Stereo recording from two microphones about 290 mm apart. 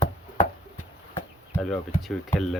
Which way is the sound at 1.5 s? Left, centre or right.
Centre.